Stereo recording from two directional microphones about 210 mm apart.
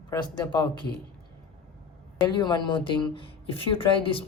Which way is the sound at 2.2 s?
20° left (ahead or behind).